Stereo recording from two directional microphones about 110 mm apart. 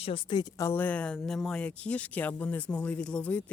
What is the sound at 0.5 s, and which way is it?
Speech, 30° left (ahead or behind).